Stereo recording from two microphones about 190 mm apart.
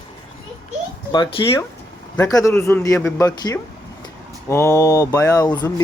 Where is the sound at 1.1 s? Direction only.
25° left (ahead or behind).